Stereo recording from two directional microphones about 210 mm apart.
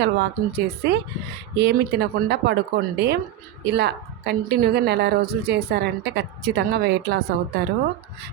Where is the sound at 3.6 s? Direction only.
55° right (ahead or behind).